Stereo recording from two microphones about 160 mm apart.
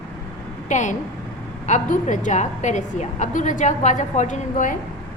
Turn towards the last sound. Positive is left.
turn(degrees=55)  # may be behind; listen again after turning